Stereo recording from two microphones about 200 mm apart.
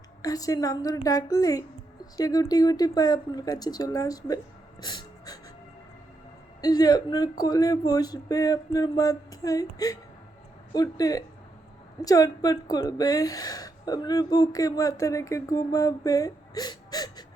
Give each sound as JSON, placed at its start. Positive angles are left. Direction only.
{"t": 0.2, "sound": "speech", "side_deg": 20}
{"t": 4.8, "sound": "gasp", "side_deg": 20}
{"t": 6.6, "sound": "speech", "side_deg": 20}